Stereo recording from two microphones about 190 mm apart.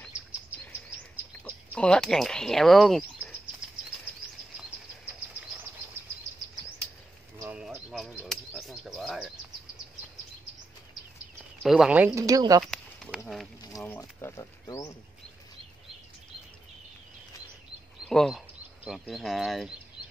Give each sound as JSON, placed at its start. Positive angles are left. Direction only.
{"t": 0.5, "sound": "chirp", "side_deg": -10}
{"t": 1.4, "sound": "speech", "side_deg": 5}
{"t": 7.3, "sound": "a sound", "side_deg": -10}
{"t": 11.6, "sound": "speech", "side_deg": -5}
{"t": 12.3, "sound": "speech", "side_deg": -20}
{"t": 12.7, "sound": "a sound", "side_deg": 5}
{"t": 13.8, "sound": "speech", "side_deg": 10}
{"t": 18.0, "sound": "speech", "side_deg": 0}